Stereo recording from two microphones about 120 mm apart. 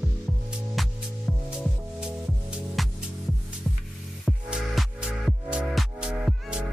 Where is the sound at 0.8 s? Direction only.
Centre (ahead or behind).